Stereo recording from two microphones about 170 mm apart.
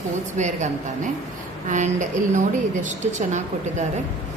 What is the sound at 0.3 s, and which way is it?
Speech, 45° right (ahead or behind).